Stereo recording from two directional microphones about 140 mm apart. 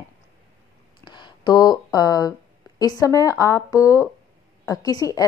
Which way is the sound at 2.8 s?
25° left (ahead or behind).